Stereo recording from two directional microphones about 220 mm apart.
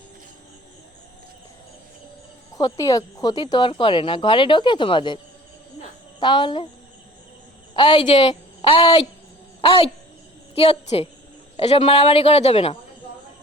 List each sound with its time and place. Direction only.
2.6 s speech: 15° left (ahead or behind)
7.7 s a woman's voice: 20° left (ahead or behind)